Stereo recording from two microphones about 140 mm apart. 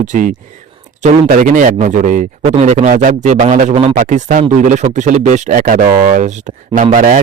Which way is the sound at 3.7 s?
45° right (ahead or behind).